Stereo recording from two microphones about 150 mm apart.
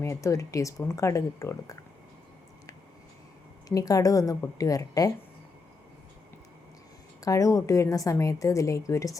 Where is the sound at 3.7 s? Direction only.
25° left (ahead or behind).